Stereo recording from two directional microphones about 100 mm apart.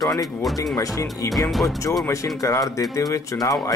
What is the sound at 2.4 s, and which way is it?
Speech, 35° left (ahead or behind).